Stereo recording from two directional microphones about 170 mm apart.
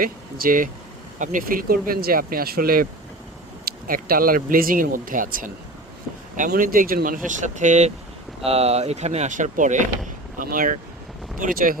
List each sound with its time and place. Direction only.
0.0 s speech: 55° right (ahead or behind)